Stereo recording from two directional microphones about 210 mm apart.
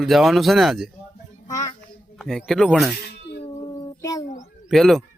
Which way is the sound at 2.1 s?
Centre (ahead or behind).